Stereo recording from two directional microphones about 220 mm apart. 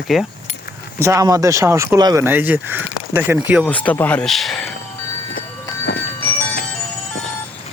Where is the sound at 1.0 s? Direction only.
15° right (ahead or behind).